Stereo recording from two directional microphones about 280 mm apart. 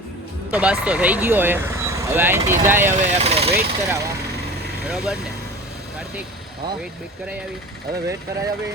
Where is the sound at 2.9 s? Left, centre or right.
Right.